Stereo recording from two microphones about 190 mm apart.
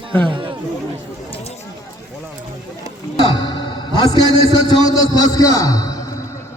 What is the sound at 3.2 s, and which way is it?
A man's voice, 25° left (ahead or behind).